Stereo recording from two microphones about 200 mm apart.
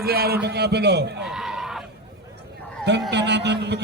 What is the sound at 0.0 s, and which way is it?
A man's voice, 50° right (ahead or behind).